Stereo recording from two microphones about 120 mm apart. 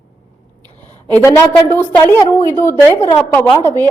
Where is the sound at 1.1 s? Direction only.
20° left (ahead or behind).